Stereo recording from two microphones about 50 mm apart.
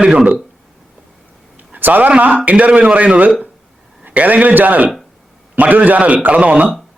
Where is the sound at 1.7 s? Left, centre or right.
Right.